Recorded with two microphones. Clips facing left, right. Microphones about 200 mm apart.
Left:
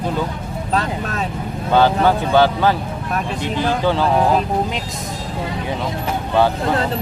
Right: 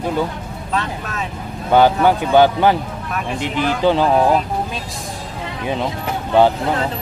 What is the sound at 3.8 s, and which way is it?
Speech, 15° right (ahead or behind).